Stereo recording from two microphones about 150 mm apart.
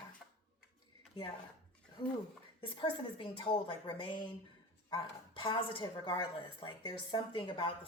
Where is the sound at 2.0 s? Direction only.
25° left (ahead or behind).